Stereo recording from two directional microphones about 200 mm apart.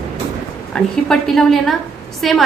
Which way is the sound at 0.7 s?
5° left (ahead or behind).